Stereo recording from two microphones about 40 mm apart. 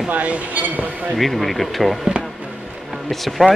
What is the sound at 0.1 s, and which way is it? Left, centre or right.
Speech, right.